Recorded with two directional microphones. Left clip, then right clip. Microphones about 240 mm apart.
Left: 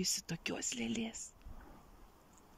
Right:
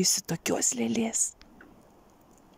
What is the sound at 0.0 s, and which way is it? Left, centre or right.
A woman's voice, right.